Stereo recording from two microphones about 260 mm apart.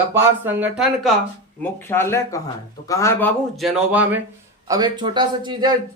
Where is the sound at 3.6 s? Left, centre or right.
Centre.